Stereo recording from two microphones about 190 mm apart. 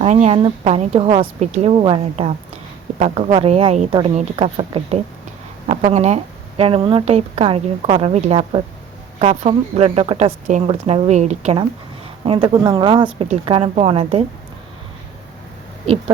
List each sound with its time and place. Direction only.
0.0 s a woman's voice: 35° right (ahead or behind)